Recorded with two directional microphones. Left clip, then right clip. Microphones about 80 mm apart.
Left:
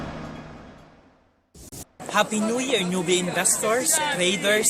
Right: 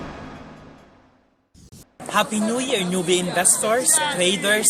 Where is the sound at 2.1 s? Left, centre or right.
Right.